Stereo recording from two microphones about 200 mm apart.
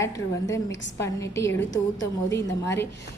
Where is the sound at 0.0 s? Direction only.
15° left (ahead or behind).